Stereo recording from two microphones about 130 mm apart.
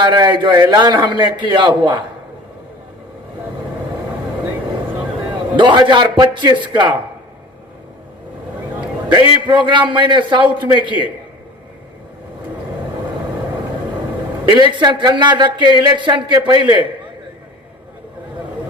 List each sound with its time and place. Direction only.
0.0 s speech: 35° right (ahead or behind)
5.5 s speech: 35° right (ahead or behind)
9.1 s speech: 35° right (ahead or behind)
14.4 s speech: 35° right (ahead or behind)